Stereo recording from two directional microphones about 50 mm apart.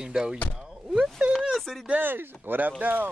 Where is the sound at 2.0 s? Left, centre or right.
Right.